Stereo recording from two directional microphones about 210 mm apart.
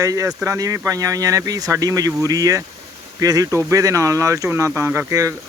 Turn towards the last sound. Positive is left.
turn(degrees=-15)  # may be behind; listen again after turning